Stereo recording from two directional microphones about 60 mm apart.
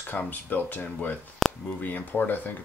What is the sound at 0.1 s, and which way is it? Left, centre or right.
Speech, left.